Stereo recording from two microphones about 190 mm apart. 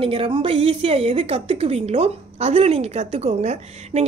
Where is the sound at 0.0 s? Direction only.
30° right (ahead or behind).